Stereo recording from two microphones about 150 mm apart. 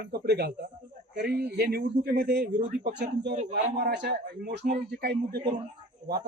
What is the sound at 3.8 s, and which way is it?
Speech, 90° right.